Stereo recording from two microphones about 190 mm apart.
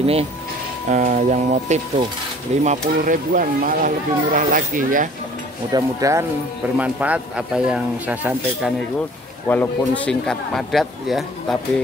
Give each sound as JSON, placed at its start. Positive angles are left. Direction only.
{"t": 0.0, "sound": "speech", "side_deg": -30}
{"t": 5.7, "sound": "speech", "side_deg": -15}
{"t": 9.5, "sound": "speech", "side_deg": 10}